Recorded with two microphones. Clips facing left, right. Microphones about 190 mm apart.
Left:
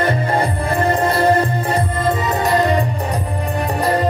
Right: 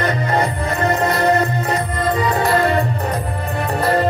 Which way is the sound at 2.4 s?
15° left (ahead or behind).